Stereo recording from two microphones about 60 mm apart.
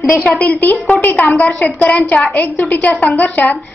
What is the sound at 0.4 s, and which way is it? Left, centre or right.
Speech, left.